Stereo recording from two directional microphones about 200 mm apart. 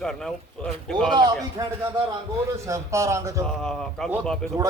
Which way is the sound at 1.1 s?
20° right (ahead or behind).